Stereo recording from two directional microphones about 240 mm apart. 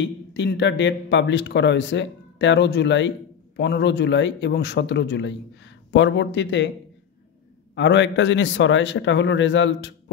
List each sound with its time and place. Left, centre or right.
0.0 s speech: left
7.7 s speech: left